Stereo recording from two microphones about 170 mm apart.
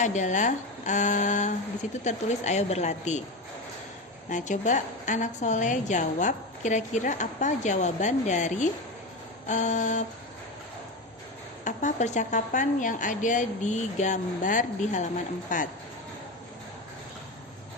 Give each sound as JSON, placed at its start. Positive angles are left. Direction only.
{"t": 0.0, "sound": "a woman's voice", "side_deg": 45}
{"t": 4.3, "sound": "a woman's voice", "side_deg": 45}
{"t": 11.6, "sound": "a woman's voice", "side_deg": 45}